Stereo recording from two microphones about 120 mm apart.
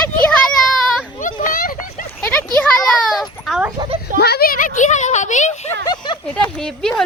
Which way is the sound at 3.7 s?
45° right (ahead or behind).